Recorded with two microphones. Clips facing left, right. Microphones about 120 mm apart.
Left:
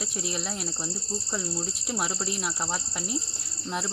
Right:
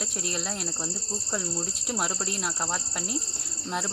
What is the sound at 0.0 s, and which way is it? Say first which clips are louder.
Speech: even; 5° left (ahead or behind).